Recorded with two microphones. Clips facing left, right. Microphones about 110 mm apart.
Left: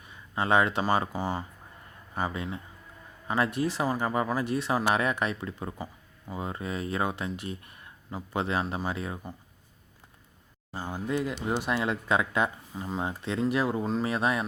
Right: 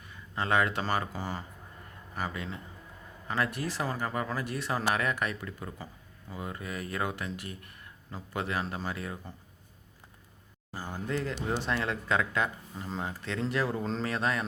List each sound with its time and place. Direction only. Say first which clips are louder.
0.0 s speech: left 3 dB; 20° left (ahead or behind)
10.8 s speech: left 3 dB; 15° left (ahead or behind)